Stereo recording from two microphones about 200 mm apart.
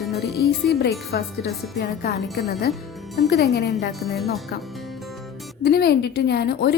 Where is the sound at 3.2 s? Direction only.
55° left (ahead or behind).